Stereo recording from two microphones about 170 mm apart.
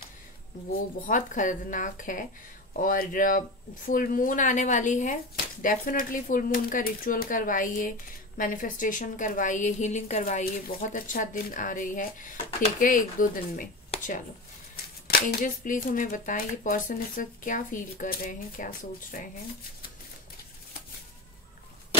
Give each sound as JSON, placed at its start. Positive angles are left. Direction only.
{"t": 0.7, "sound": "speech", "side_deg": 50}
{"t": 13.8, "sound": "a sound", "side_deg": 45}
{"t": 15.0, "sound": "speech", "side_deg": 55}